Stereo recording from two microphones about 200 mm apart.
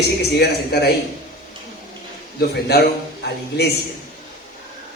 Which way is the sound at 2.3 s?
50° left (ahead or behind).